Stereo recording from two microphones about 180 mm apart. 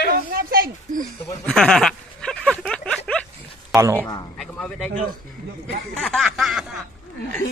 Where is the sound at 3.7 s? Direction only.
15° right (ahead or behind).